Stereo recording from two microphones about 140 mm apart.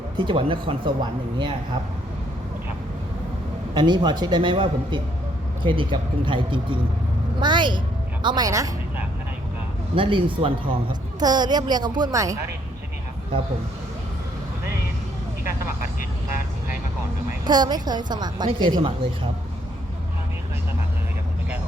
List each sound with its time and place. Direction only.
0.2 s a woman's voice: 35° right (ahead or behind)
3.8 s a woman's voice: 30° right (ahead or behind)
9.9 s a woman's voice: 35° right (ahead or behind)
17.4 s a woman's voice: 30° right (ahead or behind)